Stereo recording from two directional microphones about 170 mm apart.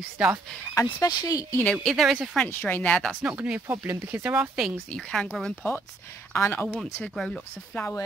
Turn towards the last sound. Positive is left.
turn(degrees=15)  # may be behind; listen again after turning